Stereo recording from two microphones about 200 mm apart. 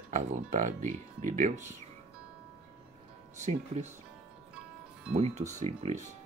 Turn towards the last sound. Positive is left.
turn(degrees=-35)  # may be behind; listen again after turning